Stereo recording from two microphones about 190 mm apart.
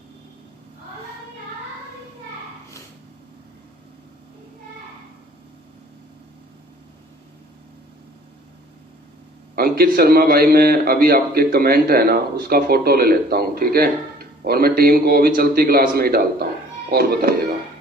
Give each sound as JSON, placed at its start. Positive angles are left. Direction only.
{"t": 9.6, "sound": "a man's voice", "side_deg": -50}